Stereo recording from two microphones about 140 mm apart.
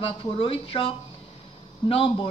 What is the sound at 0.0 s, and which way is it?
A woman's voice, 40° left (ahead or behind).